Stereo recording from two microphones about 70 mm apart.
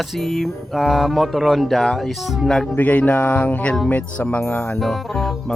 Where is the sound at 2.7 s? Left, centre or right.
Left.